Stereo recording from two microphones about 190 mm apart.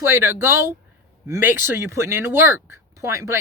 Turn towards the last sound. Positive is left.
turn(degrees=-15)  # may be behind; listen again after turning